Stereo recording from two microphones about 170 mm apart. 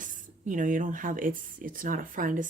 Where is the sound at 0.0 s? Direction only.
50° right (ahead or behind).